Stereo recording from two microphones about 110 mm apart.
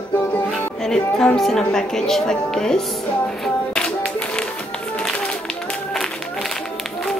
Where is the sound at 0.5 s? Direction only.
5° left (ahead or behind).